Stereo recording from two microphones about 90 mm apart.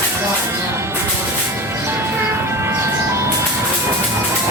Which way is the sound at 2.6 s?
30° right (ahead or behind).